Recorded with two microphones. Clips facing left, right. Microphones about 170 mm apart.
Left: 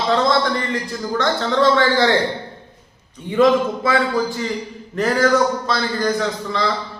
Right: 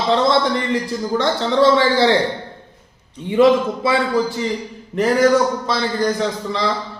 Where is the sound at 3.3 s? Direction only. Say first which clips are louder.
Right 1 dB; 20° right (ahead or behind).